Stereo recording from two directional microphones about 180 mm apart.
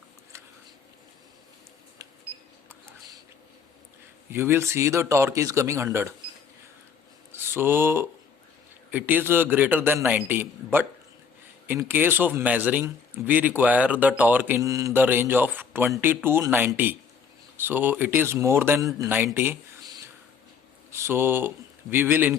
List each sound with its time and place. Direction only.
4.3 s a man's voice: 15° right (ahead or behind)
7.3 s a man's voice: 15° right (ahead or behind)